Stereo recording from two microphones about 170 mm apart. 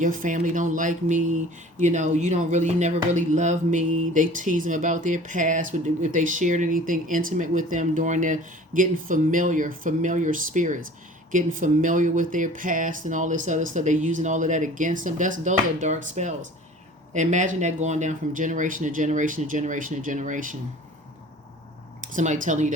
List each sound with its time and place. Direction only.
0.0 s speech: 50° right (ahead or behind)
22.1 s speech: 45° right (ahead or behind)